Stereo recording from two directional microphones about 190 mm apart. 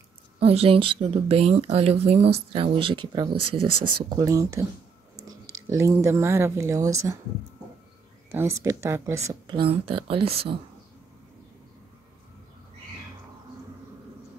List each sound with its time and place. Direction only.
0.4 s speech: 30° right (ahead or behind)
8.3 s speech: 10° right (ahead or behind)
9.6 s speech: 30° right (ahead or behind)